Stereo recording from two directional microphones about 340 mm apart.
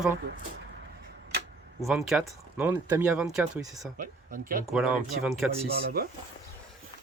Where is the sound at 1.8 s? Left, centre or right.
Centre.